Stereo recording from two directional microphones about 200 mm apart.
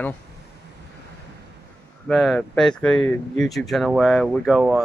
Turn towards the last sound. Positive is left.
turn(degrees=-5)  # may be behind; listen again after turning